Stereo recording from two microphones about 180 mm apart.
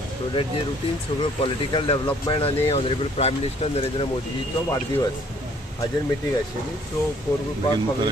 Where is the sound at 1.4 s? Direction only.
30° left (ahead or behind).